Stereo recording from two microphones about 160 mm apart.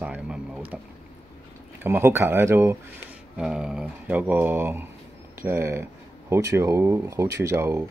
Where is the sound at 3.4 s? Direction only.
5° right (ahead or behind).